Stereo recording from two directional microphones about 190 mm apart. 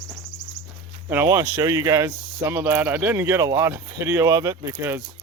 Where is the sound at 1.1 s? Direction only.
10° right (ahead or behind).